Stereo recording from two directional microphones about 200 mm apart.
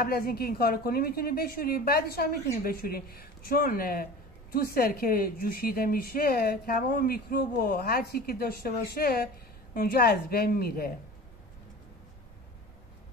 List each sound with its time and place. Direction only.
0.0 s a woman's voice: 50° left (ahead or behind)